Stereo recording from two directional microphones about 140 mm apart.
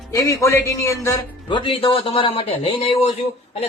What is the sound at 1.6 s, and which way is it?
Speech, 40° left (ahead or behind).